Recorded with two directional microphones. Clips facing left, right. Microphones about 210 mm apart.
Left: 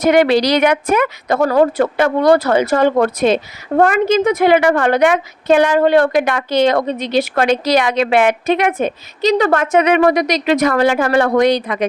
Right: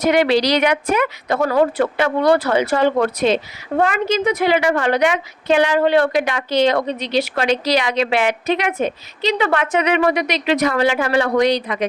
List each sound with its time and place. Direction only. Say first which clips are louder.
0.0 s a woman's voice: left 3 dB; 50° left (ahead or behind)